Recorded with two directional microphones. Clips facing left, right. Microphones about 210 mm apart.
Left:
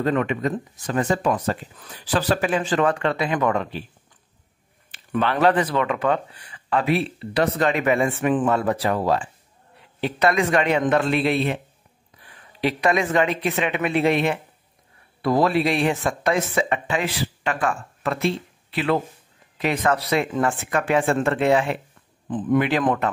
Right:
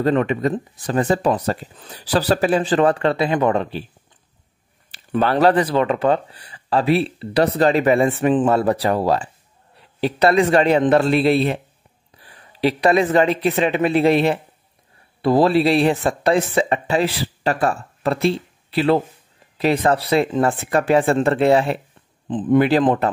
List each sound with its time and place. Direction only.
0.0 s speech: 35° right (ahead or behind)
4.9 s speech: 35° right (ahead or behind)